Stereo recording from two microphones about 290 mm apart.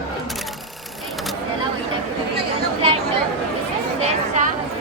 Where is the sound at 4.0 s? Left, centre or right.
Right.